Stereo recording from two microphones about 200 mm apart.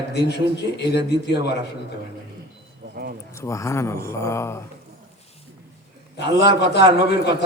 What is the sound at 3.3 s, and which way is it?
Speech, 15° left (ahead or behind).